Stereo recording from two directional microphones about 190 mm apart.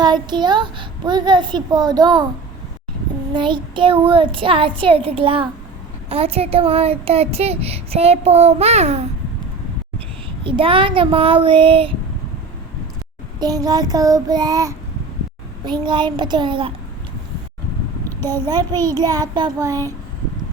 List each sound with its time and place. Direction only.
0.0 s a woman's voice: 25° right (ahead or behind)
3.3 s a woman's voice: 25° right (ahead or behind)
10.4 s a woman's voice: 30° right (ahead or behind)
13.4 s a woman's voice: 20° right (ahead or behind)
18.2 s a child's voice: 10° left (ahead or behind)
18.4 s a woman's voice: 20° right (ahead or behind)